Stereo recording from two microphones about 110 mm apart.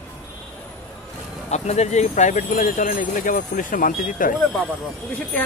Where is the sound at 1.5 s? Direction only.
90° left.